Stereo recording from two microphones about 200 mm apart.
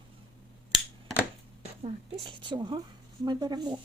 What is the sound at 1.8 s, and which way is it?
Speech, 25° right (ahead or behind).